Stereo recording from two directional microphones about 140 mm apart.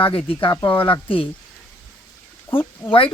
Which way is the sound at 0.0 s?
40° left (ahead or behind).